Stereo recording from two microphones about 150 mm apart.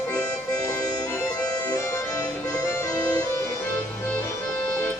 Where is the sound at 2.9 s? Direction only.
25° left (ahead or behind).